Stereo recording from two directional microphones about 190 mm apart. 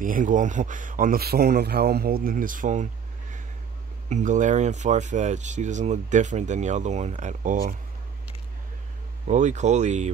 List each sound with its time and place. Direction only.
0.0 s speech: 45° right (ahead or behind)
9.3 s speech: 40° right (ahead or behind)